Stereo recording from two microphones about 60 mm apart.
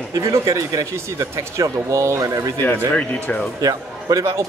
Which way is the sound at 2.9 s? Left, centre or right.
Left.